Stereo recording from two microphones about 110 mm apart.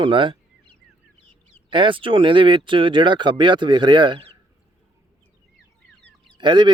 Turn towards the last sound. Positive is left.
turn(degrees=-45)  # may be behind; listen again after turning